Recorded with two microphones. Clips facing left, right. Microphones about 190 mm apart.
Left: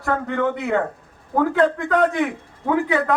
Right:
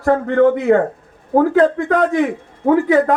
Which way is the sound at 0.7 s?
45° right (ahead or behind).